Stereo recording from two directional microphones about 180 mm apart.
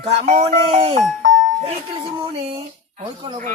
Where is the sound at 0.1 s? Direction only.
35° right (ahead or behind).